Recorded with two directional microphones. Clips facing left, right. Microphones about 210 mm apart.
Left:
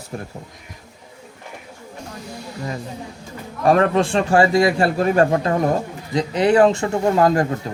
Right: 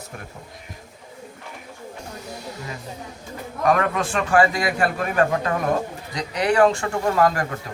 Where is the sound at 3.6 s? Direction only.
30° left (ahead or behind).